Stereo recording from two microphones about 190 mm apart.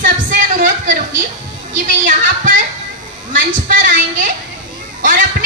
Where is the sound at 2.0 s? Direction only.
45° right (ahead or behind).